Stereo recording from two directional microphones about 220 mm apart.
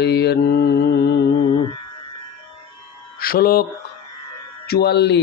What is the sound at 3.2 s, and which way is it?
Speech, 40° left (ahead or behind).